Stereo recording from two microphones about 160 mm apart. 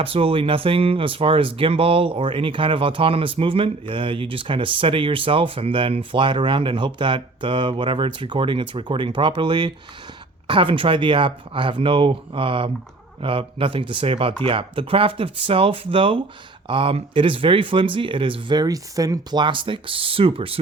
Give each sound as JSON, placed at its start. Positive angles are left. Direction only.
{"t": 0.0, "sound": "speech", "side_deg": -35}